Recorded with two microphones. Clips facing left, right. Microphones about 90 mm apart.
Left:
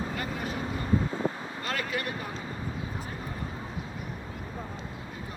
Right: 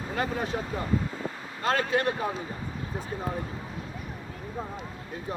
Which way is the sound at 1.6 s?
35° right (ahead or behind).